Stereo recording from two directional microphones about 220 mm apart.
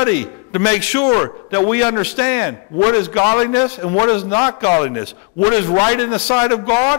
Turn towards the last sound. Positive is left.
turn(degrees=25)  # may be behind; listen again after turning